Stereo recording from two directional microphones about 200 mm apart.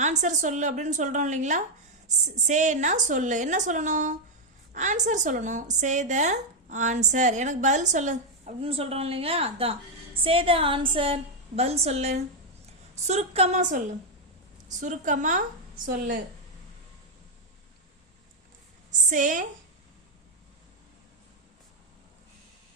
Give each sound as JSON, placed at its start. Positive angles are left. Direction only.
{"t": 0.0, "sound": "a woman's voice", "side_deg": -35}
{"t": 18.9, "sound": "a woman's voice", "side_deg": -40}